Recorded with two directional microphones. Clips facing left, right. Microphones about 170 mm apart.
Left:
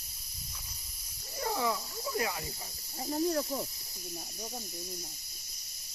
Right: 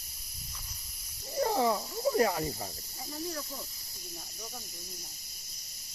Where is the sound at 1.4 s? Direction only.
35° right (ahead or behind).